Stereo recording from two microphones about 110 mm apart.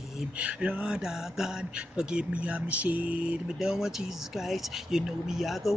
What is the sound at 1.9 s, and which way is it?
Speech, 10° right (ahead or behind).